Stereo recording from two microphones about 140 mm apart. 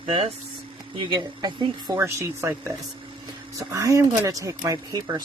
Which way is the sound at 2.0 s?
20° right (ahead or behind).